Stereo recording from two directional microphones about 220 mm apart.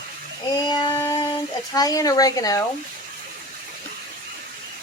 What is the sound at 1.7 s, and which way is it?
Speech, 15° left (ahead or behind).